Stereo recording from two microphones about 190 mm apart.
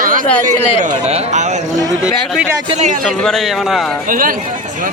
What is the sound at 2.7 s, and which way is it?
Speech, 40° right (ahead or behind).